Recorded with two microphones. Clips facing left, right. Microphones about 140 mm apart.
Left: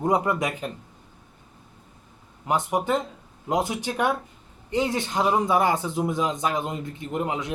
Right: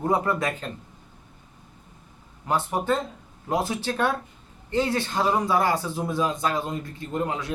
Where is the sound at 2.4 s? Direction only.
15° left (ahead or behind).